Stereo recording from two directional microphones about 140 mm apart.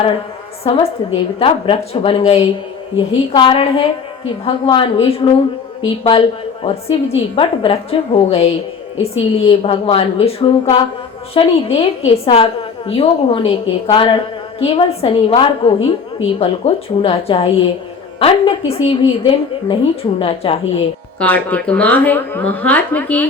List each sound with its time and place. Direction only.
0.6 s a woman's voice: 45° left (ahead or behind)
21.2 s a woman's voice: 10° left (ahead or behind)